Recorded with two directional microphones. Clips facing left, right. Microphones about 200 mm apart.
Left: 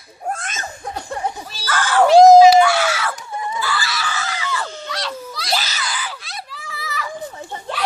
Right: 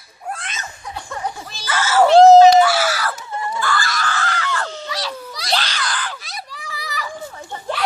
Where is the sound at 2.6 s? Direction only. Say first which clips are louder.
Even; 5° right (ahead or behind).